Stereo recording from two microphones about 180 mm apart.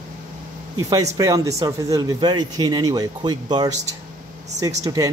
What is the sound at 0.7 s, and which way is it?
Speech, 20° right (ahead or behind).